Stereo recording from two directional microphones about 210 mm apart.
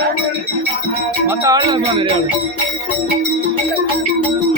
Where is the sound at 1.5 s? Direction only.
20° right (ahead or behind).